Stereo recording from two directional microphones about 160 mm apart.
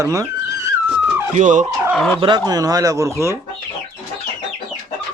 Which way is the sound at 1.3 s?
50° right (ahead or behind).